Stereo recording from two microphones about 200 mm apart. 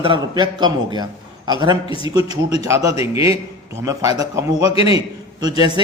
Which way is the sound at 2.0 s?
20° right (ahead or behind).